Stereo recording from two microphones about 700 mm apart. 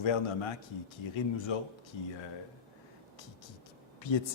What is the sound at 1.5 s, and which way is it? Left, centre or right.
Speech, left.